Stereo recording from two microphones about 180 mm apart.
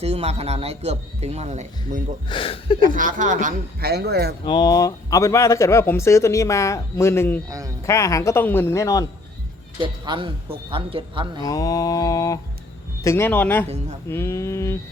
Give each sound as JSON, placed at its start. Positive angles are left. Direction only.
{"t": 0.0, "sound": "a man's voice", "side_deg": -35}
{"t": 2.3, "sound": "speech", "side_deg": 30}
{"t": 2.9, "sound": "a man's voice", "side_deg": -50}
{"t": 4.4, "sound": "speech", "side_deg": 25}
{"t": 9.8, "sound": "speech", "side_deg": -25}
{"t": 11.4, "sound": "mantra", "side_deg": 20}
{"t": 13.0, "sound": "speech", "side_deg": 15}